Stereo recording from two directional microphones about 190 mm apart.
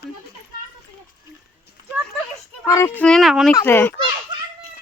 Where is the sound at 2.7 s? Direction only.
15° left (ahead or behind); by 3.5 s centre (ahead or behind).